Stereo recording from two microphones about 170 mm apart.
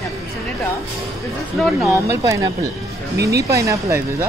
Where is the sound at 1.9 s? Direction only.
20° right (ahead or behind).